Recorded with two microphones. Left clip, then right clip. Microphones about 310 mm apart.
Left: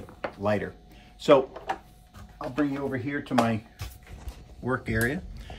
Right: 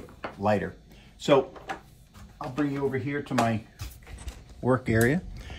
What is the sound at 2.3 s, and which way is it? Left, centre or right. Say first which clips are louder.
Music: left 2 dB; centre.